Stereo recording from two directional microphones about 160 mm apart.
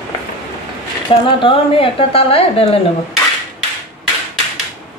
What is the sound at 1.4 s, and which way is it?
A woman's voice, 35° left (ahead or behind).